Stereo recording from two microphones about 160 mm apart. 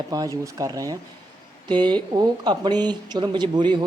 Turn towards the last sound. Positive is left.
turn(degrees=-30)  # may be behind; listen again after turning